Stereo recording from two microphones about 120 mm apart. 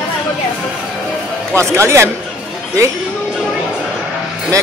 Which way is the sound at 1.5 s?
25° right (ahead or behind).